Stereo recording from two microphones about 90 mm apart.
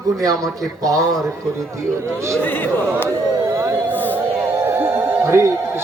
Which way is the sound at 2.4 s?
20° left (ahead or behind).